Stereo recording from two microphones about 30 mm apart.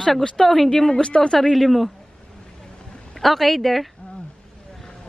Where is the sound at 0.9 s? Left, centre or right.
Left.